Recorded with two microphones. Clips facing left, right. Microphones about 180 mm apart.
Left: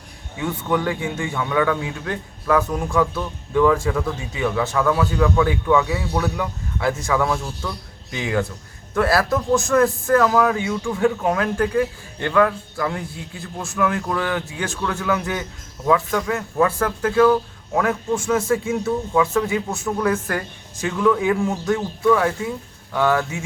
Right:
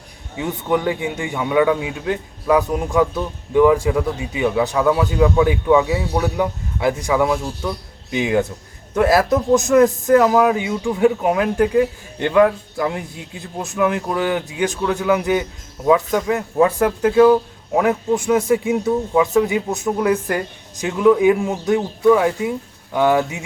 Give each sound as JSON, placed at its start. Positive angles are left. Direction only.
{"t": 0.3, "sound": "a man's voice", "side_deg": -20}